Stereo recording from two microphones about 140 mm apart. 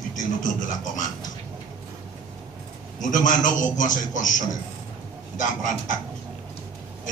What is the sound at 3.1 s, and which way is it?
A man's voice, 65° left (ahead or behind).